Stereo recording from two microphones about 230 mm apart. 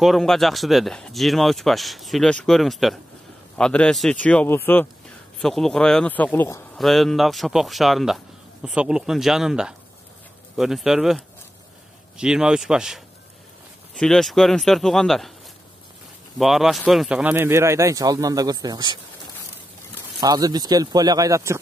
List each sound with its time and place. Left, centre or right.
0.0 s speech: centre
16.3 s speech: centre
20.2 s speech: centre